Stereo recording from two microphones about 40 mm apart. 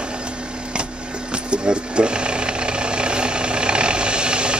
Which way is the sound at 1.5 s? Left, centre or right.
Right.